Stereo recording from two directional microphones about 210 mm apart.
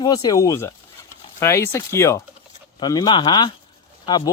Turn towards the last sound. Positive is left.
turn(degrees=20)  # may be behind; listen again after turning